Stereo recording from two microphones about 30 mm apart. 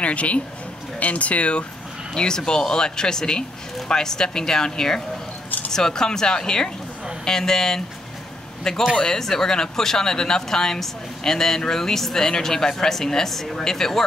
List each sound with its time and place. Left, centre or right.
0.0 s speech: left
2.1 s speech: left
8.9 s speech: left